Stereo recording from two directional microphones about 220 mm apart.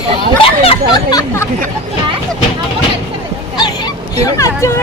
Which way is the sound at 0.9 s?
15° left (ahead or behind).